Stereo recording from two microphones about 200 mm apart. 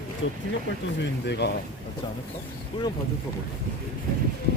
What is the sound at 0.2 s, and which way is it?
Speech, 75° left (ahead or behind).